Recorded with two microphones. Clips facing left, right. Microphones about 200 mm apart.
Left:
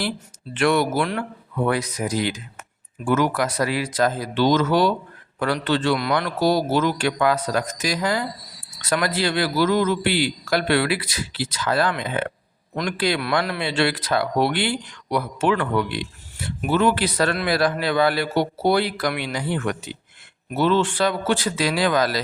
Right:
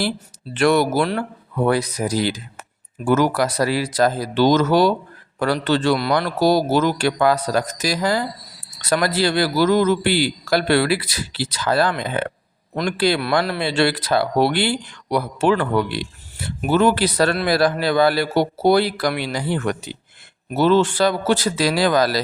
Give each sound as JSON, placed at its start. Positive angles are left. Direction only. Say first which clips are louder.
{"t": 0.5, "sound": "speech", "louder": "right 3 dB", "side_deg": -40}